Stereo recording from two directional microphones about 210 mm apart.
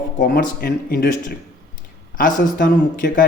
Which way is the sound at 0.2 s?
50° left (ahead or behind).